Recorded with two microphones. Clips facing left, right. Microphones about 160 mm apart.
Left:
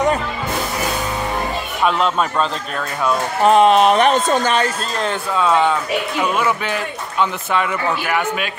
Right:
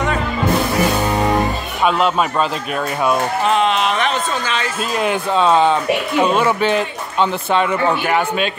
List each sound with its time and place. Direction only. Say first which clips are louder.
1.9 s speech: right 2 dB; 5° right (ahead or behind)
3.4 s speech: left 8 dB; 45° left (ahead or behind)
5.3 s a man's voice: right 2 dB; 25° right (ahead or behind)